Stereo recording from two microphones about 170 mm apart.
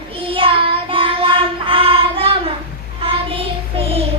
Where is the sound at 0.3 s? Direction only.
30° right (ahead or behind).